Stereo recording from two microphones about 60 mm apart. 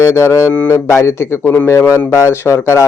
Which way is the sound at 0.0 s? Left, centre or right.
Left.